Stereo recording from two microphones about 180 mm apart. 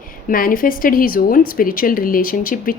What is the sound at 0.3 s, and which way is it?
Speech, 50° left (ahead or behind).